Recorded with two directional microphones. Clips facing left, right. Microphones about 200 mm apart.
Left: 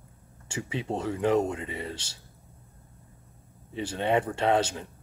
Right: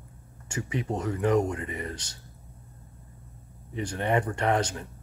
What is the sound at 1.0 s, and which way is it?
Speech, 10° left (ahead or behind).